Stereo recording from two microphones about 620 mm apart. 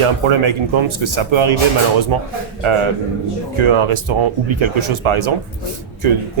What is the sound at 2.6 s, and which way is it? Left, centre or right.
Speech, right.